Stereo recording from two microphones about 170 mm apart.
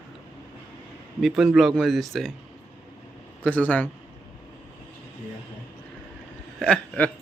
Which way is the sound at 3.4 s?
10° left (ahead or behind).